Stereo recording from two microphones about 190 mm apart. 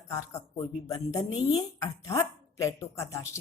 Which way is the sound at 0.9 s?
20° left (ahead or behind).